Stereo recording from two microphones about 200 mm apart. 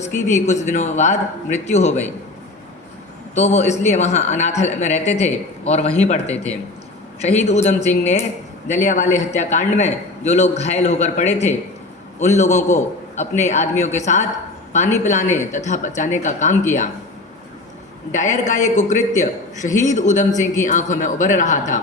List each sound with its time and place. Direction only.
0.0 s a man's voice: 35° left (ahead or behind)
3.3 s a man's voice: 35° left (ahead or behind)
18.1 s a man's voice: 35° left (ahead or behind)